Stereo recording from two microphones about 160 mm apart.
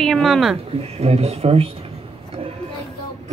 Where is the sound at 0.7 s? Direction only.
40° right (ahead or behind).